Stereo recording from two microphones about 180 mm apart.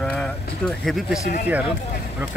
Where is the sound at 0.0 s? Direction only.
5° left (ahead or behind).